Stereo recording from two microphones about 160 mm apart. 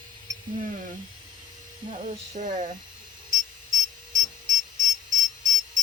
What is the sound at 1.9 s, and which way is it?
Speech, 50° right (ahead or behind).